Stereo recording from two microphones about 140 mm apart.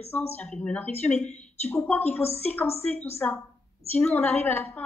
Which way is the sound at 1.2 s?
55° left (ahead or behind).